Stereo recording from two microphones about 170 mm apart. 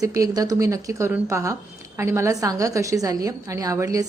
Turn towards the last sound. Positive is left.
turn(degrees=-20)  # may be behind; listen again after turning